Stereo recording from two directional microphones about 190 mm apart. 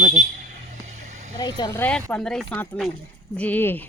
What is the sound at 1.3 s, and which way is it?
Speech, 20° left (ahead or behind).